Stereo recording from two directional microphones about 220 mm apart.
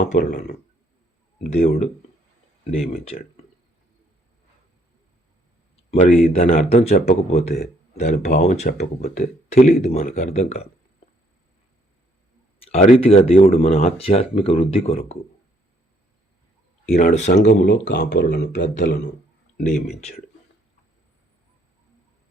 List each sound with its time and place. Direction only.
0.1 s speech: 35° left (ahead or behind)
1.6 s speech: 35° left (ahead or behind)
5.7 s speech: 30° left (ahead or behind)
8.1 s speech: 45° left (ahead or behind)
8.4 s speech: 30° left (ahead or behind)
12.6 s speech: 30° left (ahead or behind)
16.9 s speech: 40° left (ahead or behind)
17.3 s speech: 50° left (ahead or behind)
18.5 s speech: 35° left (ahead or behind)